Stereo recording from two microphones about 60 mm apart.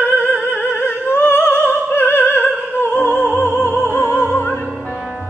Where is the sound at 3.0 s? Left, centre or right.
Left.